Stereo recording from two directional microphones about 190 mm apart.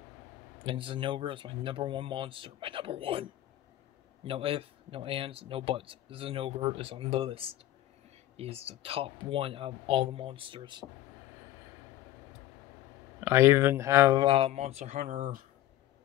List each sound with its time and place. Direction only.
0.7 s a man's voice: 25° right (ahead or behind)
13.2 s speech: 10° right (ahead or behind)
14.2 s speech: 30° right (ahead or behind)